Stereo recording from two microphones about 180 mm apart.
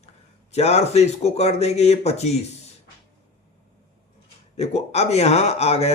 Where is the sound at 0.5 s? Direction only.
35° left (ahead or behind).